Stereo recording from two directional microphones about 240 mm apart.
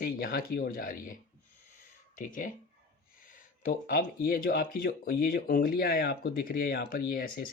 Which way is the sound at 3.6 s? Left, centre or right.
Left.